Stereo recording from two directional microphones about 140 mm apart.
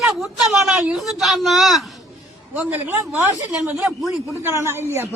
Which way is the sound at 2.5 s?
15° right (ahead or behind).